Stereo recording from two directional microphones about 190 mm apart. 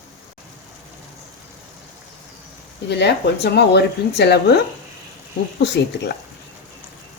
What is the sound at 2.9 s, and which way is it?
Speech, 60° left (ahead or behind).